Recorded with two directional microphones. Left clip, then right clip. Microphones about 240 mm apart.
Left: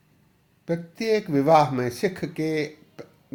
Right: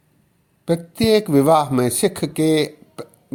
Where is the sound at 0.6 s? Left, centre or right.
Right.